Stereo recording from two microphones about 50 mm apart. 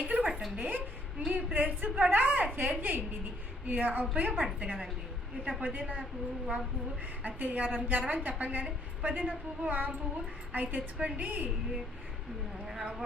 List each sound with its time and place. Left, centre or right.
0.0 s a sound: right
0.5 s a woman's voice: right
7.2 s a woman's voice: right
12.8 s speech: centre